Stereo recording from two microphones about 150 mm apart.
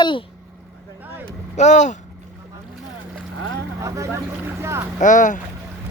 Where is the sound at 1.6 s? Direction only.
50° left (ahead or behind).